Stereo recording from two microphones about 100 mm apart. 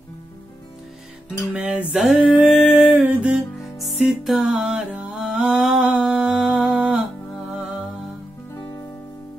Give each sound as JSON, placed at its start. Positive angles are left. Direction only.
{"t": 1.5, "sound": "music", "side_deg": -10}
{"t": 2.1, "sound": "a sound", "side_deg": -15}
{"t": 3.1, "sound": "music", "side_deg": -10}
{"t": 3.8, "sound": "music", "side_deg": 0}
{"t": 4.5, "sound": "mantra", "side_deg": -15}
{"t": 7.4, "sound": "music", "side_deg": -5}
{"t": 8.5, "sound": "music", "side_deg": 30}